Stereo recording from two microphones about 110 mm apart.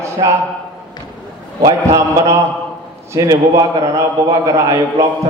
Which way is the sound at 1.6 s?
25° right (ahead or behind).